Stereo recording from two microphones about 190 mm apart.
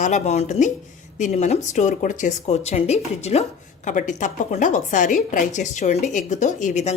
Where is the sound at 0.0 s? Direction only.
35° left (ahead or behind).